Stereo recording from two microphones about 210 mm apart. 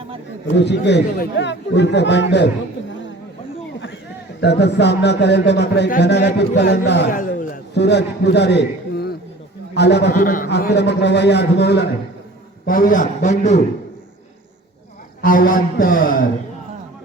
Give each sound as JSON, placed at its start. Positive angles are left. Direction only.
{"t": 0.4, "sound": "speech", "side_deg": 55}
{"t": 4.4, "sound": "a man's voice", "side_deg": 55}
{"t": 10.1, "sound": "a man's voice", "side_deg": 40}
{"t": 12.6, "sound": "a man's voice", "side_deg": 40}
{"t": 15.2, "sound": "a man's voice", "side_deg": 40}